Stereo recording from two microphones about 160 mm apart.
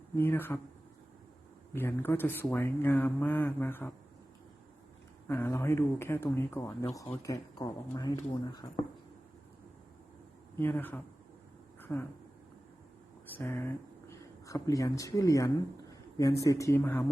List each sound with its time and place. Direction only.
0.2 s speech: 15° left (ahead or behind)
1.7 s speech: 15° left (ahead or behind)
5.3 s speech: 15° left (ahead or behind)
10.6 s speech: 10° left (ahead or behind)
11.8 s a sound: 10° left (ahead or behind)
13.2 s speech: 15° left (ahead or behind)